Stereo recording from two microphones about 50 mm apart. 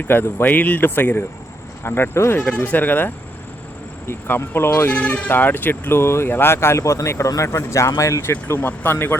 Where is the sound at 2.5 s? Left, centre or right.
Left.